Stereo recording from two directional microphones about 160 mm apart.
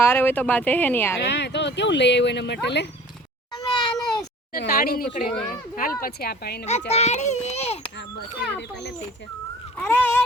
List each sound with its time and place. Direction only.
0.0 s speech: 15° left (ahead or behind)
1.2 s speech: 90° left
3.6 s cat: 30° left (ahead or behind)
4.5 s a woman's voice: 65° left (ahead or behind)
6.7 s a child's voice: 45° left (ahead or behind)
9.7 s speech: 10° left (ahead or behind)